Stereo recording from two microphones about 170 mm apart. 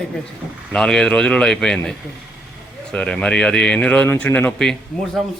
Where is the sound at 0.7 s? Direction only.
5° left (ahead or behind).